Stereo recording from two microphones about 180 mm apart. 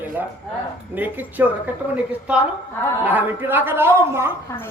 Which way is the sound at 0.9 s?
10° right (ahead or behind).